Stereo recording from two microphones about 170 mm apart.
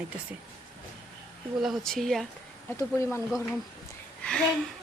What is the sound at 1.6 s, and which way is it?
Speech, centre (ahead or behind).